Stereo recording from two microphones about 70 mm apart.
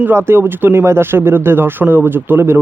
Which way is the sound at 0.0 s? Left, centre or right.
Right.